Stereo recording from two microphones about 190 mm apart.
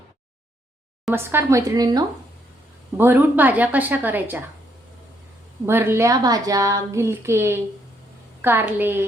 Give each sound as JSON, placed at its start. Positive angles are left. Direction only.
{"t": 1.1, "sound": "a woman's voice", "side_deg": -10}
{"t": 3.0, "sound": "a woman's voice", "side_deg": -10}
{"t": 5.6, "sound": "a woman's voice", "side_deg": -10}